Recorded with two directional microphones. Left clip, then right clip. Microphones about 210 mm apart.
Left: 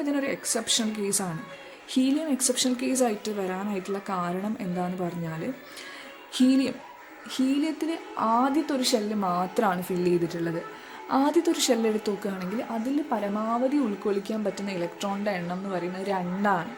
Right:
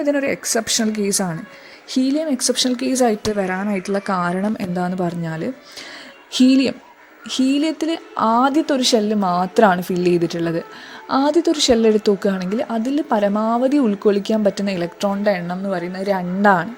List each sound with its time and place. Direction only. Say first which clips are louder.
0.0 s a woman's voice: right 9 dB; 30° right (ahead or behind)
11.1 s a woman's voice: right 7 dB; 25° right (ahead or behind)